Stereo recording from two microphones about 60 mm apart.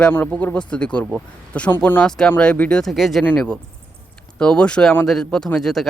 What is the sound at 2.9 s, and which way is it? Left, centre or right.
Speech, centre.